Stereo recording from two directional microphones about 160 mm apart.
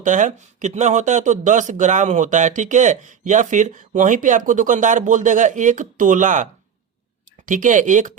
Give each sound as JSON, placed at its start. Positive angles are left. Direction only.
{"t": 0.0, "sound": "speech", "side_deg": -50}